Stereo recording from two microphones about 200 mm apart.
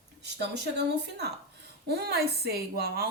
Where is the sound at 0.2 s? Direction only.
60° right (ahead or behind).